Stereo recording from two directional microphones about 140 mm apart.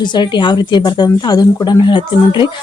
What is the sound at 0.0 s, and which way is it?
Speech, 30° left (ahead or behind).